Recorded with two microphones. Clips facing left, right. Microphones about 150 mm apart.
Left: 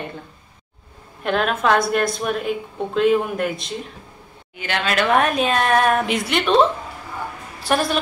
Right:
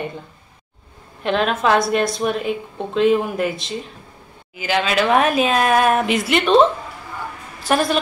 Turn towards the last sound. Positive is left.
turn(degrees=0)  # may be behind; listen again after turning